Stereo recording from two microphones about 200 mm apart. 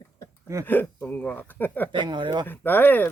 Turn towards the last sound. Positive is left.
turn(degrees=10)  # may be behind; listen again after turning